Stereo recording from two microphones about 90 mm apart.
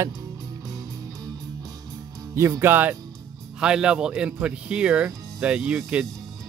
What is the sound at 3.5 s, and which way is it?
Speech, 10° right (ahead or behind).